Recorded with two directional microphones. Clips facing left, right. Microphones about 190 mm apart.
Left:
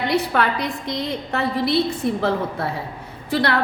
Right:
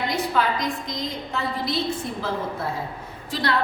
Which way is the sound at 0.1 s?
65° left (ahead or behind).